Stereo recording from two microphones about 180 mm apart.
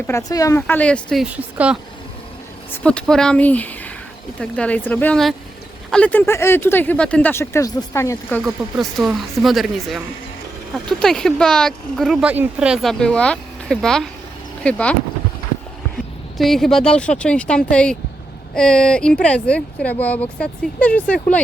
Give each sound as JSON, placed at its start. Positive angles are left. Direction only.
{"t": 0.1, "sound": "speech", "side_deg": 20}
{"t": 1.2, "sound": "speech", "side_deg": -5}
{"t": 2.8, "sound": "speech", "side_deg": 5}
{"t": 8.4, "sound": "speech", "side_deg": 0}
{"t": 16.4, "sound": "speech", "side_deg": 0}